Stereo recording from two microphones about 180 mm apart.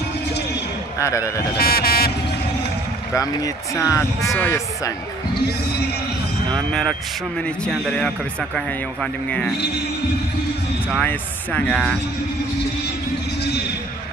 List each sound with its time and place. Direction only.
0.9 s speech: 15° left (ahead or behind)
1.6 s vehicle: 55° left (ahead or behind)
3.2 s speech: 20° left (ahead or behind)
6.5 s speech: centre (ahead or behind)
11.0 s speech: 10° left (ahead or behind)